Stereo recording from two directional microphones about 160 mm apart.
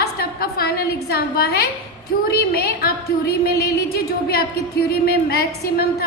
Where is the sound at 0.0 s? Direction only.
80° left.